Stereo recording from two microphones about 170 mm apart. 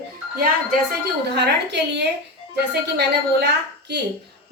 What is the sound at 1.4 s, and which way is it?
A woman's voice, 85° right.